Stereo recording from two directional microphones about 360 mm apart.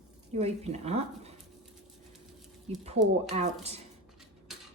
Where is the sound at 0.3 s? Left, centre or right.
Centre.